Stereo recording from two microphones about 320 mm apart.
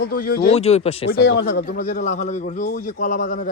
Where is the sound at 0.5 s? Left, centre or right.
Centre.